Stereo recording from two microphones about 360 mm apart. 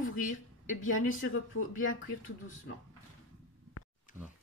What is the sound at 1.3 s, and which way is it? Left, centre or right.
Speech, left.